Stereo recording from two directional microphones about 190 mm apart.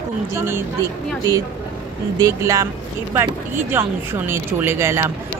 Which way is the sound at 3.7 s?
10° right (ahead or behind).